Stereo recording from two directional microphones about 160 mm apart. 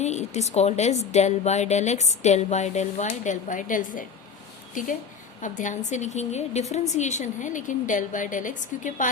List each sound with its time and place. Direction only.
0.0 s speech: 45° left (ahead or behind)
5.4 s speech: 50° left (ahead or behind)